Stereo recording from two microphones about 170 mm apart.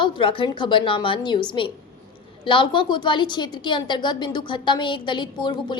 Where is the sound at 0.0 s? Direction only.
30° left (ahead or behind).